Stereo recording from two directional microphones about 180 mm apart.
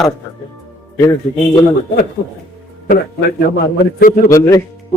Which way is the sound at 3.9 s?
50° left (ahead or behind).